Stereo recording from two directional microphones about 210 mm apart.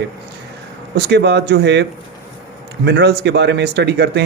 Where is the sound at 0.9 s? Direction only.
55° right (ahead or behind).